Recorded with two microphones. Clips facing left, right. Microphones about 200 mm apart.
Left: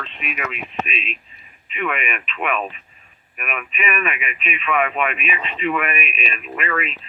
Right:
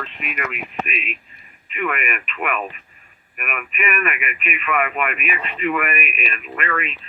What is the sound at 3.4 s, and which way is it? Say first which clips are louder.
Speech: even; 5° right (ahead or behind).